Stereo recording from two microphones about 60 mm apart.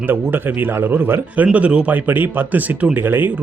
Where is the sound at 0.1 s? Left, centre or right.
Right.